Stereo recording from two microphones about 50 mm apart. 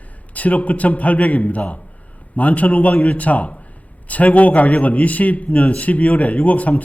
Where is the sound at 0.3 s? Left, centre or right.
Left.